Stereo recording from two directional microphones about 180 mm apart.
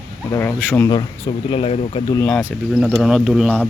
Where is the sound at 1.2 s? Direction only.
35° left (ahead or behind).